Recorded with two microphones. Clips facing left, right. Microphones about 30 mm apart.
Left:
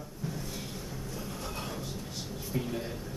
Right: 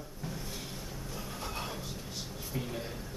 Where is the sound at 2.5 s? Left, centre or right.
Centre.